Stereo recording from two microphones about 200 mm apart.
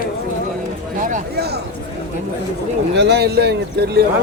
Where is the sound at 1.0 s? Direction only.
40° right (ahead or behind).